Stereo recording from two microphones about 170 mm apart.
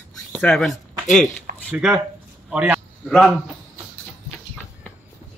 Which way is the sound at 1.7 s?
Centre (ahead or behind).